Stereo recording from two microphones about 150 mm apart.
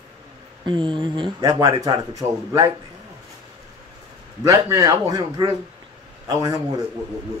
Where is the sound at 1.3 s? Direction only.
20° right (ahead or behind).